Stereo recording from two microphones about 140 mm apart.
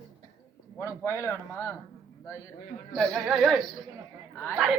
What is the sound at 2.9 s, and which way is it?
Speech, centre (ahead or behind).